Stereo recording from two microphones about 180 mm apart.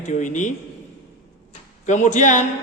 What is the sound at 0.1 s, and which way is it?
Speech, 45° left (ahead or behind).